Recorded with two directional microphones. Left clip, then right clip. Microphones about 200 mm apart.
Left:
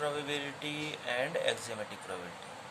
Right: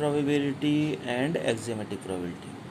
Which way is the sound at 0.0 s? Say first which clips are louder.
Right 8 dB; 10° right (ahead or behind).